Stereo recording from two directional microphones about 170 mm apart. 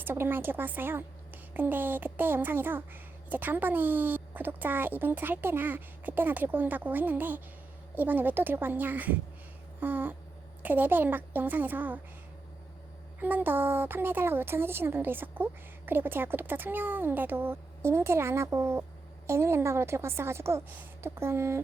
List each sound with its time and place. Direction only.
0.0 s speech: 15° right (ahead or behind)
13.1 s speech: 10° right (ahead or behind)